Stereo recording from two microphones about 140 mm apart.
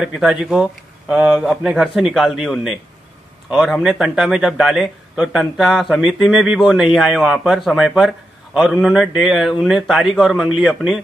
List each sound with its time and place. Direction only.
0.0 s speech: 5° right (ahead or behind)